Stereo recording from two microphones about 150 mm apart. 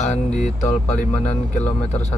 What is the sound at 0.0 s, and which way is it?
Speech, 50° left (ahead or behind).